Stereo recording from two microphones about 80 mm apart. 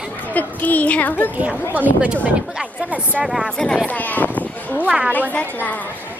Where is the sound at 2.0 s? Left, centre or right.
Centre.